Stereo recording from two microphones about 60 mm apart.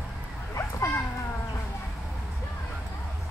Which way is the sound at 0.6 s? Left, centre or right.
Left.